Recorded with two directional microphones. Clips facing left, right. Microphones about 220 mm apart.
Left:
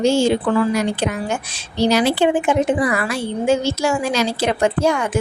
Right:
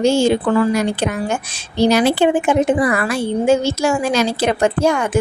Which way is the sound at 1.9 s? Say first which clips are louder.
Right 1 dB; 55° right (ahead or behind).